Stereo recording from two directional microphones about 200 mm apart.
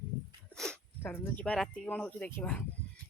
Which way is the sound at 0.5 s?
5° left (ahead or behind).